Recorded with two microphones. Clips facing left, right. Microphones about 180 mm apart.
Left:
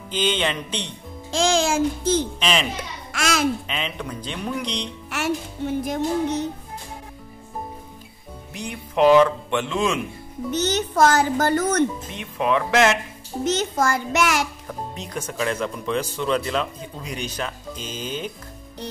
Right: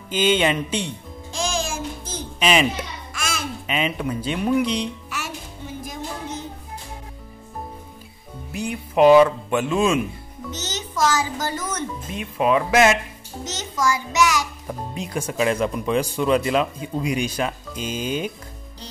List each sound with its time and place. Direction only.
0.1 s speech: 5° right (ahead or behind)
1.3 s music: 85° left
3.1 s babbling: 75° left (ahead or behind)
3.6 s speech: 5° right (ahead or behind)
5.1 s music: 65° left (ahead or behind)
8.5 s speech: 5° right (ahead or behind)
10.5 s a child's voice: 60° left (ahead or behind)
12.1 s speech: 5° right (ahead or behind)
13.4 s a child's voice: 60° left (ahead or behind)
14.7 s speech: 10° right (ahead or behind)